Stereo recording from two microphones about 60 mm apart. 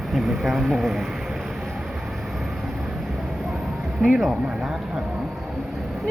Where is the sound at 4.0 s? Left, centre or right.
Centre.